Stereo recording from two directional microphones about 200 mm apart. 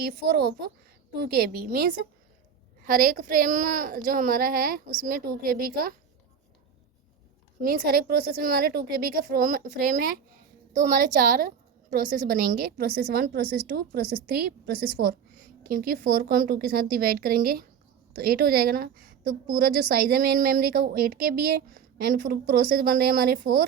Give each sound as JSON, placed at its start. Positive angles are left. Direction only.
{"t": 0.0, "sound": "a woman's voice", "side_deg": -50}
{"t": 7.6, "sound": "a woman's voice", "side_deg": -50}